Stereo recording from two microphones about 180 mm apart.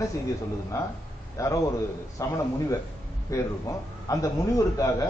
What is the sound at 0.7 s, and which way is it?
A man's voice, 15° left (ahead or behind).